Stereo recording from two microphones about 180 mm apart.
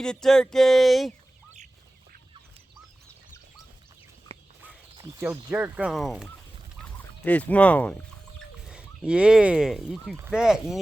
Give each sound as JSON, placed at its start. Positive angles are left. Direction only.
{"t": 0.0, "sound": "speech", "side_deg": 5}
{"t": 4.3, "sound": "a sound", "side_deg": -30}
{"t": 5.2, "sound": "speech", "side_deg": -10}
{"t": 6.8, "sound": "fowl", "side_deg": 10}
{"t": 8.6, "sound": "speech", "side_deg": -5}